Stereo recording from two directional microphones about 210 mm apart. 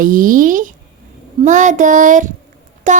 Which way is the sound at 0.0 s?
40° right (ahead or behind).